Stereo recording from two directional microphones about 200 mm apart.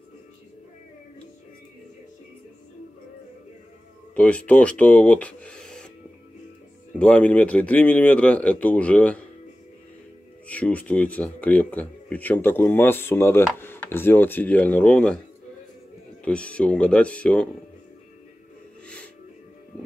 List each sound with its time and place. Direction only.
4.1 s speech: 5° left (ahead or behind)
7.0 s speech: 5° left (ahead or behind)
10.5 s speech: 5° left (ahead or behind)
16.3 s speech: 5° left (ahead or behind)